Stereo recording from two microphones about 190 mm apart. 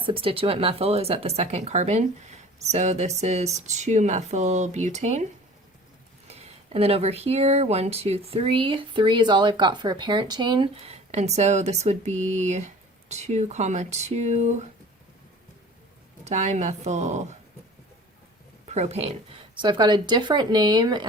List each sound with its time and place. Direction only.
0.0 s speech: 30° right (ahead or behind)
16.2 s speech: 35° right (ahead or behind)
18.7 s speech: 35° right (ahead or behind)